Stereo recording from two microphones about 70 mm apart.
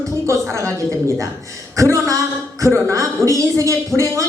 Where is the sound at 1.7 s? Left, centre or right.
Right.